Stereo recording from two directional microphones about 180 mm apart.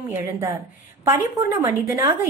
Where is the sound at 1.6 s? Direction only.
15° right (ahead or behind).